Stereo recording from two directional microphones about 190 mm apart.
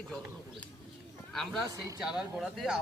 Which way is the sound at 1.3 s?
Centre (ahead or behind).